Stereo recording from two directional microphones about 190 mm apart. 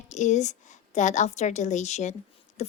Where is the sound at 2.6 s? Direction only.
35° left (ahead or behind).